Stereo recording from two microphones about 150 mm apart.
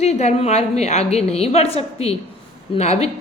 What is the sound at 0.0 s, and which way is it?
A woman's voice, 45° left (ahead or behind).